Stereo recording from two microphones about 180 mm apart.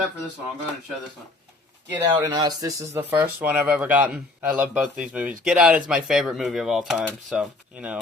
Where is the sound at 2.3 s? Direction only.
20° right (ahead or behind).